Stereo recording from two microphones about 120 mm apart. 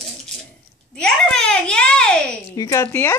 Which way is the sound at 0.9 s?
5° left (ahead or behind).